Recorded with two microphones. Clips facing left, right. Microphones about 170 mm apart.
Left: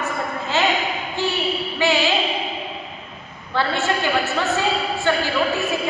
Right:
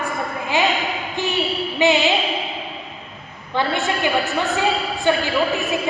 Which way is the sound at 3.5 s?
15° right (ahead or behind).